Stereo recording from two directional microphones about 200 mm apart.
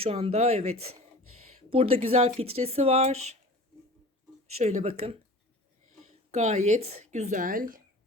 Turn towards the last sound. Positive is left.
turn(degrees=-45)  # may be behind; listen again after turning